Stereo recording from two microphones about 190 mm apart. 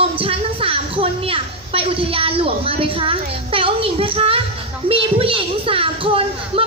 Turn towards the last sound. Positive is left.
turn(degrees=-30)  # may be behind; listen again after turning